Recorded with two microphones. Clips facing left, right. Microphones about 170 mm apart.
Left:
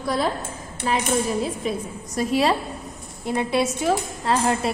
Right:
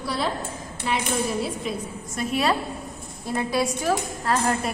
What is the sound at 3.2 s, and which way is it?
Speech, 20° left (ahead or behind).